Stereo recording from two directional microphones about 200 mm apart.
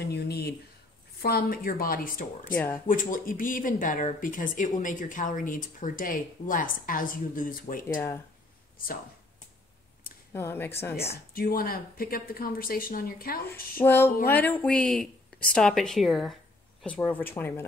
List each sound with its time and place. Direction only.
0.0 s a sound: 55° left (ahead or behind)
1.2 s speech: 45° left (ahead or behind)
2.5 s speech: 10° left (ahead or behind)
2.9 s speech: 45° left (ahead or behind)
10.3 s speech: 10° left (ahead or behind)
11.3 s speech: 45° left (ahead or behind)
13.7 s speech: 10° left (ahead or behind)